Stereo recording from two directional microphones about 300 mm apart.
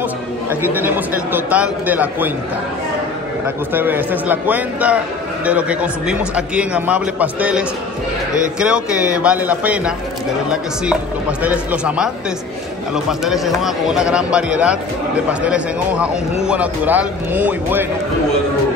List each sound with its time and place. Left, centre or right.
0.7 s a man's voice: centre
3.7 s a man's voice: centre
11.4 s a man's voice: centre